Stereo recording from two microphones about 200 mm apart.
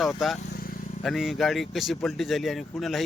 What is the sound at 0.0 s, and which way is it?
Speech, centre (ahead or behind).